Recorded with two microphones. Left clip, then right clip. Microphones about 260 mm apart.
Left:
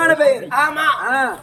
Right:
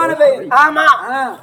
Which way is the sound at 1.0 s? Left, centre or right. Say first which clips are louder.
Left 1 dB; centre.